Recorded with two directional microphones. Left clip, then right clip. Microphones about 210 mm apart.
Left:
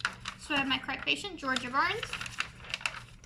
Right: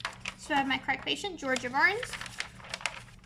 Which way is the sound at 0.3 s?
30° right (ahead or behind).